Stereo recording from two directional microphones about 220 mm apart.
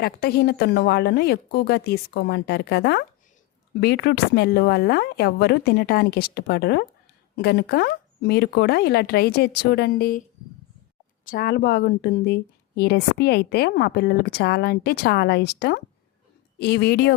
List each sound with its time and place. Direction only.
0.0 s speech: 45° left (ahead or behind)
11.3 s speech: 45° left (ahead or behind)